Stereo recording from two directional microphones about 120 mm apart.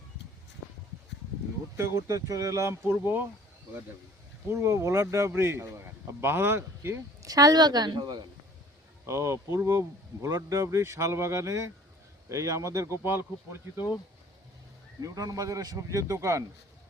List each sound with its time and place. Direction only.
1.7 s speech: 25° right (ahead or behind)
4.4 s speech: 20° right (ahead or behind)
7.3 s a woman's voice: 30° right (ahead or behind)
9.0 s speech: 25° right (ahead or behind)
15.0 s speech: 30° right (ahead or behind)